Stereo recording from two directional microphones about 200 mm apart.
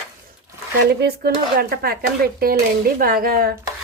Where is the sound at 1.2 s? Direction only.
50° right (ahead or behind).